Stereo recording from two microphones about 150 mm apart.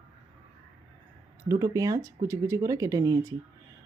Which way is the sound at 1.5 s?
20° right (ahead or behind).